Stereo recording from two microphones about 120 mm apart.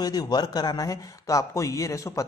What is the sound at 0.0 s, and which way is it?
Speech, 35° left (ahead or behind).